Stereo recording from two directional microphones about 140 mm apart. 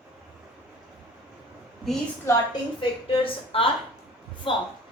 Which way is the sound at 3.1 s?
40° left (ahead or behind).